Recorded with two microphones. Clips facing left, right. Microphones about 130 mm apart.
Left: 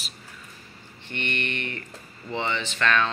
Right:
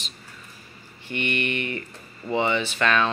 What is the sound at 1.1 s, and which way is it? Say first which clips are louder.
A man's voice: right 4 dB; 10° right (ahead or behind).